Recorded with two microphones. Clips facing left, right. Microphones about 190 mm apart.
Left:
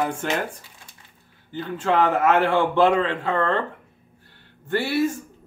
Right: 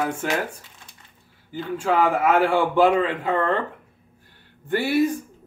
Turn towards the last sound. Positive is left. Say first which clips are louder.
# right 2 dB
turn(degrees=-15)  # may be behind; listen again after turning